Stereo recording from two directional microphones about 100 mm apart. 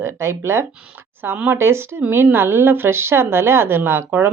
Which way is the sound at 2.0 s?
15° right (ahead or behind).